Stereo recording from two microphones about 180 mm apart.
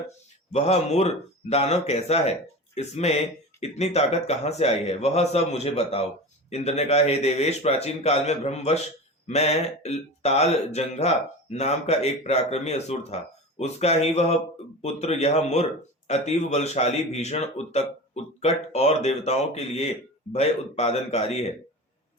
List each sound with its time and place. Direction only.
0.5 s speech: 35° left (ahead or behind)